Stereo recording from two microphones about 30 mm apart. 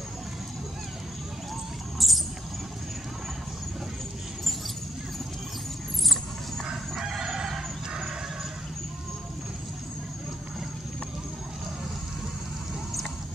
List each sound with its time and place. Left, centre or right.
2.0 s rodents: centre
7.3 s chicken: centre